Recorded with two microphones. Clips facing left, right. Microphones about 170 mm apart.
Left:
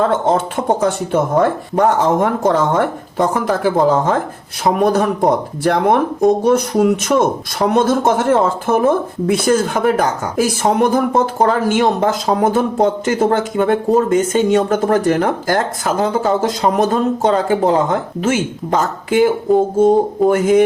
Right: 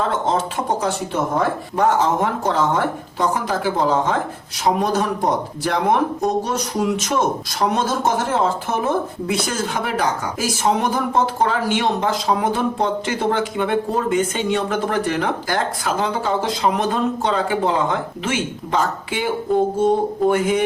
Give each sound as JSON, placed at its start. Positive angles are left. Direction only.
{"t": 0.1, "sound": "speech", "side_deg": 50}
{"t": 20.3, "sound": "speech", "side_deg": 45}